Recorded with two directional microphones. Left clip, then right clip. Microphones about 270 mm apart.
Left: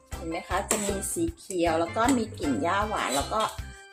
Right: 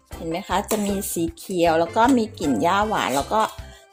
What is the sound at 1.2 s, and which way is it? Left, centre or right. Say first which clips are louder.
Speech: right 7 dB; right.